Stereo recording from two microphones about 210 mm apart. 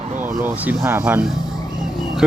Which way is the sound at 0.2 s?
10° right (ahead or behind).